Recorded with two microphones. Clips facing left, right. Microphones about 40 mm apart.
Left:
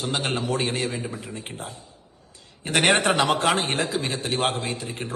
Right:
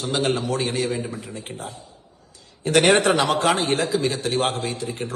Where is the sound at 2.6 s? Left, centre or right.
Left.